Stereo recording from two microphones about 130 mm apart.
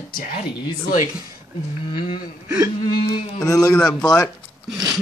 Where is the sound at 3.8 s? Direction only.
5° left (ahead or behind).